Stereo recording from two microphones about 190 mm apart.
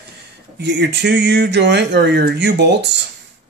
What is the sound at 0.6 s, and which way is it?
Speech, 65° right (ahead or behind).